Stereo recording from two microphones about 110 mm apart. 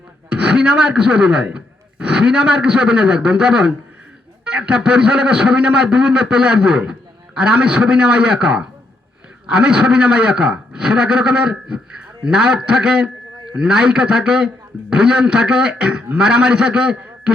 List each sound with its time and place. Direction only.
0.4 s a man's voice: 5° right (ahead or behind)